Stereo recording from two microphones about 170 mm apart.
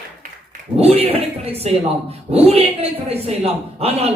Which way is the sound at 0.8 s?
35° right (ahead or behind).